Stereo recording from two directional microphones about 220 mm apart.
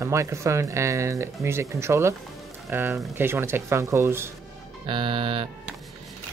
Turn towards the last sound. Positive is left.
turn(degrees=-25)  # may be behind; listen again after turning